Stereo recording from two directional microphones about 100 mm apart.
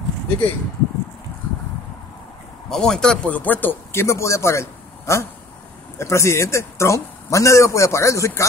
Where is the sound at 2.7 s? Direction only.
5° left (ahead or behind).